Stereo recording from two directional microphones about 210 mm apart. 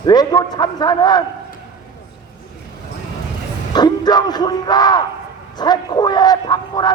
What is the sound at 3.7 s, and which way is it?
Speech, 20° left (ahead or behind).